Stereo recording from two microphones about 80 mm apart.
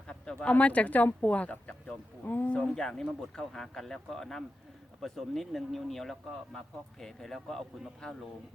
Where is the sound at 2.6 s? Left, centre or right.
Centre.